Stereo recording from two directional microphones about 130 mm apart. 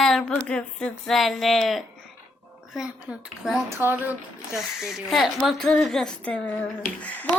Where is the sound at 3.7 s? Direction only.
20° right (ahead or behind).